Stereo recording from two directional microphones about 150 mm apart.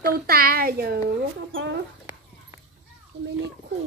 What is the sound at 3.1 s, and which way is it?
Children playing, 40° right (ahead or behind).